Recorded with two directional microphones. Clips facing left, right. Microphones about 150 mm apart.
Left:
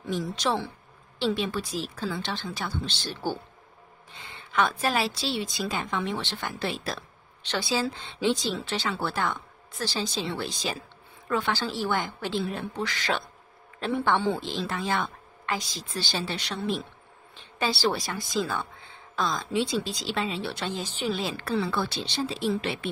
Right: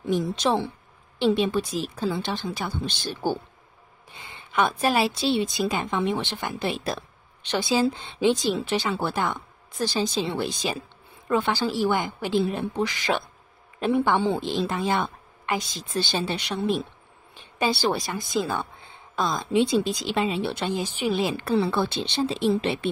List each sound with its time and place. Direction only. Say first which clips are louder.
0.0 s a woman's voice: right 5 dB; 20° right (ahead or behind)
17.8 s a woman's voice: right 2 dB; 20° right (ahead or behind)